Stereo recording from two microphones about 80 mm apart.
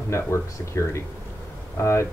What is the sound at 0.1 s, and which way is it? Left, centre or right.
Speech, left.